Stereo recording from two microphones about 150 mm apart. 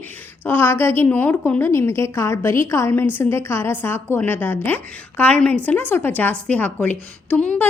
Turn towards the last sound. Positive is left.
turn(degrees=10)  # may be behind; listen again after turning